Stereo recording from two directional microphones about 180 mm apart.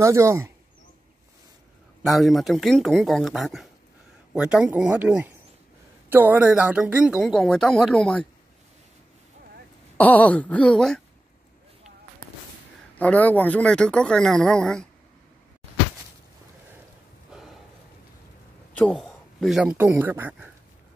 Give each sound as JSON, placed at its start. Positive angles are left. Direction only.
{"t": 0.0, "sound": "speech", "side_deg": -15}
{"t": 2.0, "sound": "speech", "side_deg": 0}
{"t": 9.9, "sound": "speech", "side_deg": 10}
{"t": 13.0, "sound": "speech", "side_deg": 10}
{"t": 18.8, "sound": "a man's voice", "side_deg": 5}